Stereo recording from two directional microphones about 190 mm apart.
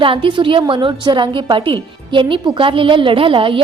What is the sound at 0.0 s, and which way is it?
A woman's voice, 25° right (ahead or behind).